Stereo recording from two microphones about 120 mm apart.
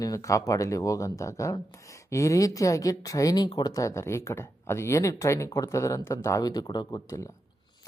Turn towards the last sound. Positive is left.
turn(degrees=25)  # may be behind; listen again after turning